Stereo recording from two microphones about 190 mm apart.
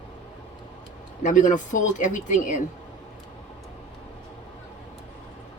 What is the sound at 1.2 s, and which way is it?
Speech, 40° left (ahead or behind).